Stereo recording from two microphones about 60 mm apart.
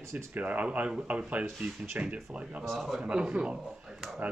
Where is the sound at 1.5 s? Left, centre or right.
Centre.